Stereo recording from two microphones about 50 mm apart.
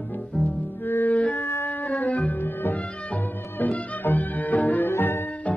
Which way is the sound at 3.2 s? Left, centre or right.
Left.